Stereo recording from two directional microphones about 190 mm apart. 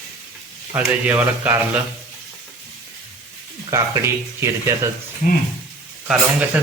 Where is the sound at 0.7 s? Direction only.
10° right (ahead or behind).